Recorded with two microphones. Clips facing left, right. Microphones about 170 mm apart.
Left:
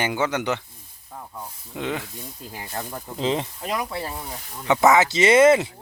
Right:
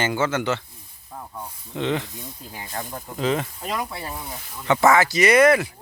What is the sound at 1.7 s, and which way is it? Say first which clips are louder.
Speech: right 4 dB; 10° left (ahead or behind).